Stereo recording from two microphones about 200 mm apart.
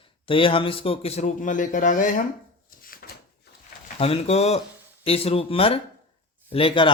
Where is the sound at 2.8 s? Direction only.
45° left (ahead or behind).